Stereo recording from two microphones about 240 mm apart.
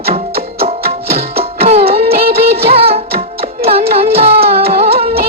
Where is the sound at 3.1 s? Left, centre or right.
Right.